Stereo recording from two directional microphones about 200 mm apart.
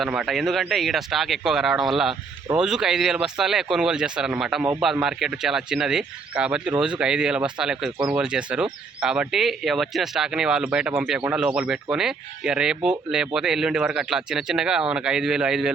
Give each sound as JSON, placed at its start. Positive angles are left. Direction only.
{"t": 0.0, "sound": "speech", "side_deg": -5}